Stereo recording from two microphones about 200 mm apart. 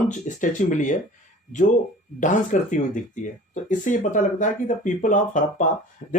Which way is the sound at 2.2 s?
40° left (ahead or behind).